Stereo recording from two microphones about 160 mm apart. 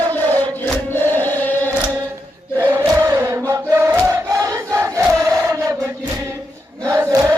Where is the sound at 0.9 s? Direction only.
15° left (ahead or behind).